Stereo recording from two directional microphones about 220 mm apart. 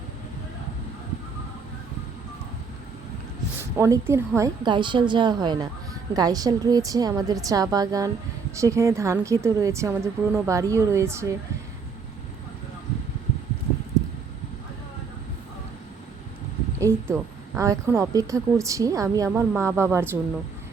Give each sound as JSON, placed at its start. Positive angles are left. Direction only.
{"t": 3.8, "sound": "a woman's voice", "side_deg": -15}
{"t": 16.8, "sound": "a woman's voice", "side_deg": -10}